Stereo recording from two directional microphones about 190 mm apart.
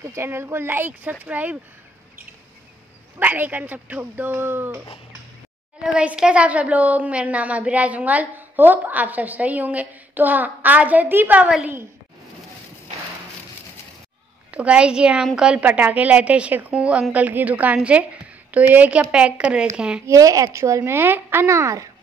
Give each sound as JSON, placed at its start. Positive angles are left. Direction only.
{"t": 0.0, "sound": "a woman's voice", "side_deg": -15}
{"t": 3.2, "sound": "a woman's voice", "side_deg": -10}
{"t": 5.9, "sound": "a woman's voice", "side_deg": -5}
{"t": 14.5, "sound": "a woman's voice", "side_deg": -5}
{"t": 20.1, "sound": "a woman's voice", "side_deg": -15}